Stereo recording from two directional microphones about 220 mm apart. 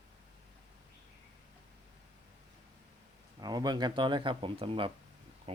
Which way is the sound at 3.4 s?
20° right (ahead or behind).